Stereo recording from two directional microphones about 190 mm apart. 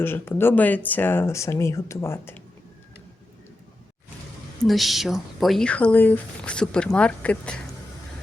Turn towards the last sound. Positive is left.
turn(degrees=5)  # may be behind; listen again after turning